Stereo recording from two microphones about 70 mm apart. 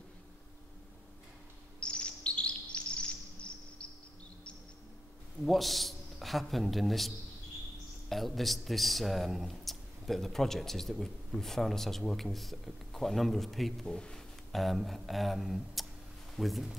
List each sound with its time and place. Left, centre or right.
1.8 s chirp: centre
5.4 s a man's voice: centre
8.1 s speech: centre